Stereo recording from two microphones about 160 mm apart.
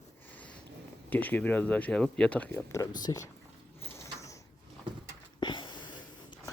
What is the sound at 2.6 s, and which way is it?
Speech, 20° left (ahead or behind).